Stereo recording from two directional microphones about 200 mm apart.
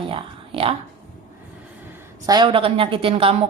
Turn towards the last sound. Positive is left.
turn(degrees=-25)  # may be behind; listen again after turning